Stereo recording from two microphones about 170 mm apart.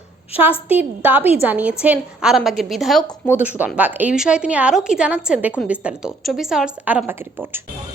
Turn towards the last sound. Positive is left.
turn(degrees=-10)  # may be behind; listen again after turning